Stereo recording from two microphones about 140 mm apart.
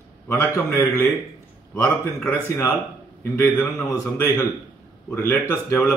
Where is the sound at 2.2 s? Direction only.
15° left (ahead or behind).